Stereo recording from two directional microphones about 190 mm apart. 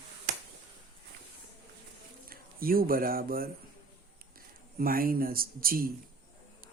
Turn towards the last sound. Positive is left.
turn(degrees=-50)  # may be behind; listen again after turning